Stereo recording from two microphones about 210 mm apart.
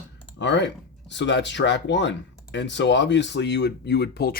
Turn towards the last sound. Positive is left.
turn(degrees=50)  # may be behind; listen again after turning